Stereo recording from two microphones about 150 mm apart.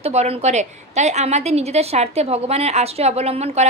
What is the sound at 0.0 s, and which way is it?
A woman's voice, 45° right (ahead or behind).